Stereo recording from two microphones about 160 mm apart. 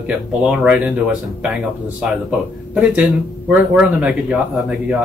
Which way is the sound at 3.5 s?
5° right (ahead or behind).